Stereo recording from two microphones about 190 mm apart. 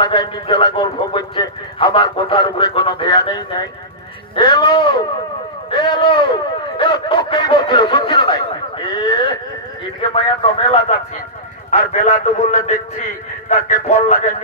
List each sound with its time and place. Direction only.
0.0 s a man's voice: 25° left (ahead or behind)
13.8 s a man's voice: 35° left (ahead or behind)